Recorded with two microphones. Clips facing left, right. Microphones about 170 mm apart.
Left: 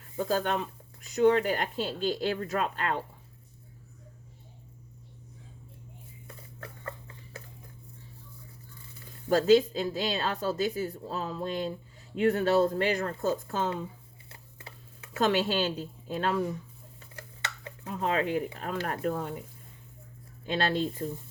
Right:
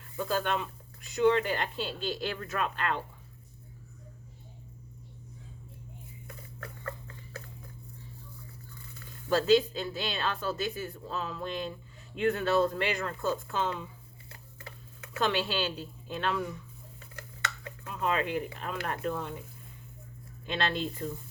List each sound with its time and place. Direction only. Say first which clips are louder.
0.2 s speech: left 2 dB; 40° left (ahead or behind)
9.3 s speech: left 3 dB; 40° left (ahead or behind)
14.3 s tick-tock: right 1 dB; 30° left (ahead or behind)
15.2 s speech: left 4 dB; 45° left (ahead or behind)
17.2 s a sound: right 2 dB; 30° left (ahead or behind)
18.6 s speech: left 3 dB; 45° left (ahead or behind)
20.5 s speech: left 3 dB; 35° left (ahead or behind)